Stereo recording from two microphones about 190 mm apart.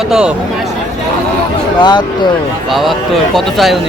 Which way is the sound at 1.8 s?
25° left (ahead or behind).